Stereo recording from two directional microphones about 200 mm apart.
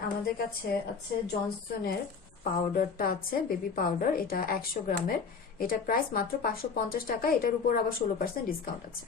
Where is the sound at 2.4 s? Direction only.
45° left (ahead or behind).